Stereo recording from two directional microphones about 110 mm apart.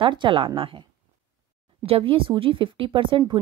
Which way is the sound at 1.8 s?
55° right (ahead or behind).